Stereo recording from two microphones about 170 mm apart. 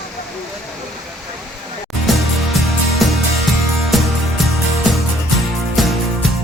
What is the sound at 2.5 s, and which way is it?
Music, centre (ahead or behind).